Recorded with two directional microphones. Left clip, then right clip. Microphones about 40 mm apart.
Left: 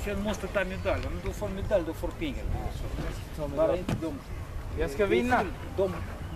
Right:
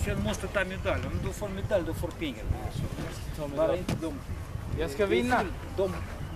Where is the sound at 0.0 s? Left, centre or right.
Right.